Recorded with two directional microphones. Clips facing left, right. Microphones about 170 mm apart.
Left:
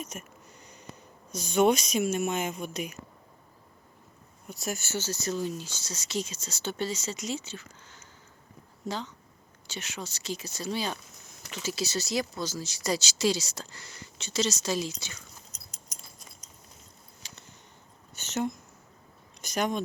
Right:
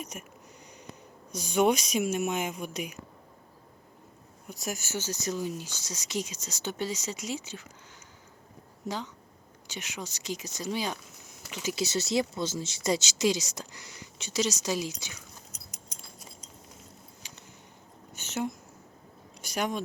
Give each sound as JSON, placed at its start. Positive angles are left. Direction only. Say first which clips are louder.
{"t": 0.1, "sound": "speech", "louder": "left 1 dB", "side_deg": -10}
{"t": 0.6, "sound": "a sound", "louder": "right 2 dB", "side_deg": -15}
{"t": 1.3, "sound": "speech", "louder": "left 1 dB", "side_deg": -15}
{"t": 4.4, "sound": "speech", "louder": "left 1 dB", "side_deg": -15}
{"t": 9.6, "sound": "speech", "louder": "even", "side_deg": -15}
{"t": 15.5, "sound": "a sound", "louder": "right 3 dB", "side_deg": -10}
{"t": 15.9, "sound": "keys jangling", "louder": "even", "side_deg": -30}
{"t": 18.1, "sound": "a sound", "louder": "left 2 dB", "side_deg": -10}
{"t": 19.4, "sound": "speech", "louder": "left 2 dB", "side_deg": -10}